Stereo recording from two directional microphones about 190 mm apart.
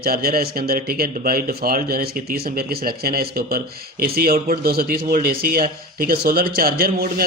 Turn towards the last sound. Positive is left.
turn(degrees=-50)  # may be behind; listen again after turning